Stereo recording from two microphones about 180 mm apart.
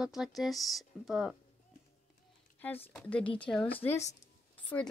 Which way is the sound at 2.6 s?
10° left (ahead or behind).